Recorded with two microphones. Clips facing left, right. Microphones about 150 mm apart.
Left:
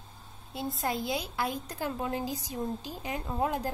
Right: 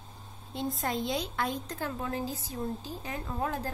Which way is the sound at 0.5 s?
5° left (ahead or behind).